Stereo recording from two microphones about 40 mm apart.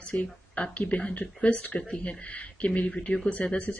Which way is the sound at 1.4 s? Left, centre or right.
Left.